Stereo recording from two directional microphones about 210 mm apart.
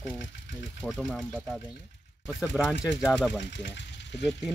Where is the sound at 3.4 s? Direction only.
55° left (ahead or behind).